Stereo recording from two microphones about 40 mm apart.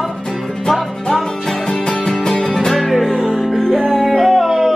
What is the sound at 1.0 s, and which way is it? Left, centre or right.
Music, centre.